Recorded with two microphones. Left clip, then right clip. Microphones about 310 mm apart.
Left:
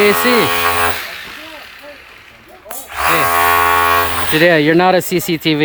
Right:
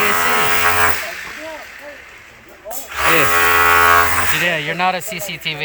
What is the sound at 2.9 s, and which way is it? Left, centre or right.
Cattle, centre.